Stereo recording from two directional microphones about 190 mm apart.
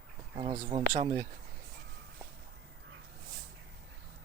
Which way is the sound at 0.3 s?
20° right (ahead or behind).